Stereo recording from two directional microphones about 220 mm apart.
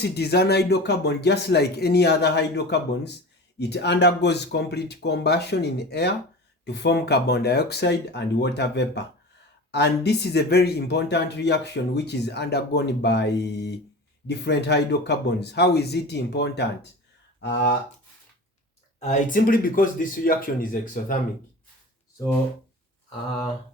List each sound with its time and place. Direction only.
0.0 s speech: 45° left (ahead or behind)
18.9 s speech: 35° left (ahead or behind)